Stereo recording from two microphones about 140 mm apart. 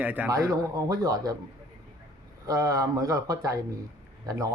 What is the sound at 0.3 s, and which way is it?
A man's voice, 20° right (ahead or behind).